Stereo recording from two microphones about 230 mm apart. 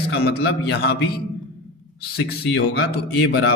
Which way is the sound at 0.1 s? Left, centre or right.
Left.